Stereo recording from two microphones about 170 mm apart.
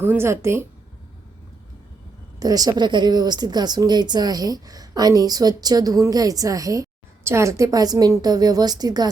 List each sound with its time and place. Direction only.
0.0 s a woman's voice: 15° right (ahead or behind)
2.4 s speech: 20° right (ahead or behind)